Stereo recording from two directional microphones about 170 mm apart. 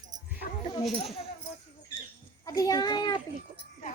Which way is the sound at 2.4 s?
20° left (ahead or behind).